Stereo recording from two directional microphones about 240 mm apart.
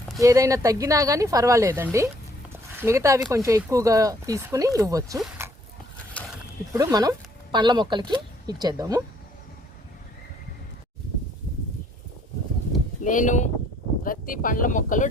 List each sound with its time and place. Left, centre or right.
0.2 s speech: centre
6.7 s speech: centre
13.1 s speech: left